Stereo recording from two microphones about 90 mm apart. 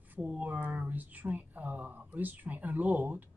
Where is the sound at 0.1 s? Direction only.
15° right (ahead or behind).